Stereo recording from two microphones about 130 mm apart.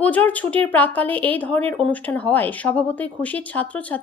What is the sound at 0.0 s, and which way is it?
A woman's voice, 10° left (ahead or behind).